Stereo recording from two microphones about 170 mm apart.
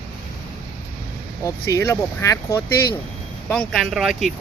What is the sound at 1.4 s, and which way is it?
Speech, 15° left (ahead or behind).